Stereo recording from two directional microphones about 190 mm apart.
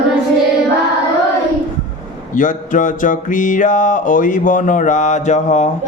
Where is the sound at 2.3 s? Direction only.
45° left (ahead or behind).